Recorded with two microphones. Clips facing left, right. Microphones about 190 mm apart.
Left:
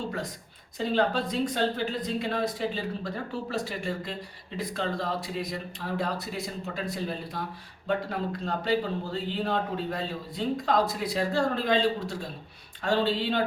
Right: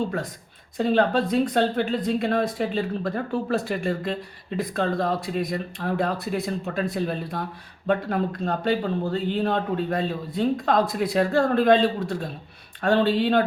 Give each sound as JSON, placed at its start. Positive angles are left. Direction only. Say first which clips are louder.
{"t": 0.8, "sound": "a man's voice", "louder": "right 5 dB", "side_deg": -55}